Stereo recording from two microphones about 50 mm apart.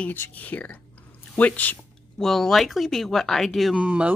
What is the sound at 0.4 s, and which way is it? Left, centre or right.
Speech, left.